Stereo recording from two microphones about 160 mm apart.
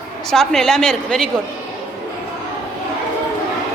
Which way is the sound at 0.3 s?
5° left (ahead or behind).